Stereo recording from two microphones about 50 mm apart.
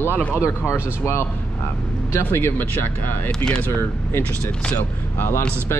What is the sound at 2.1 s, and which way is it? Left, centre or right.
Speech, left.